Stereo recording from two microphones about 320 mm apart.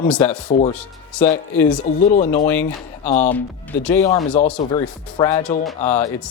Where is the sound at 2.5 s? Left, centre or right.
Centre.